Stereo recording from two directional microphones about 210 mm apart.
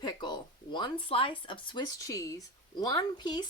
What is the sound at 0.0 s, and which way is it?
Speech, 20° left (ahead or behind).